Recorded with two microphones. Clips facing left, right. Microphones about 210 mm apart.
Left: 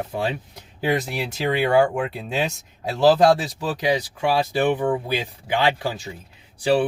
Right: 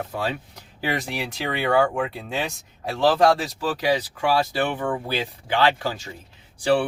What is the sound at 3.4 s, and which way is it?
Speech, 20° left (ahead or behind).